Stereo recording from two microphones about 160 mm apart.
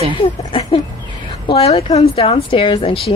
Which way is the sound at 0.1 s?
30° left (ahead or behind).